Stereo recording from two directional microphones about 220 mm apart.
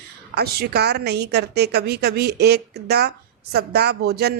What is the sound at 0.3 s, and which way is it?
A woman's voice, 45° right (ahead or behind).